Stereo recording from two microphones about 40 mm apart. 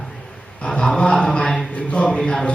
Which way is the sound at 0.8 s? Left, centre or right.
Left.